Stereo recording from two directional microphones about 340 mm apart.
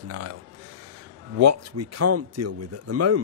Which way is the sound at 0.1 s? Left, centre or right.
Right.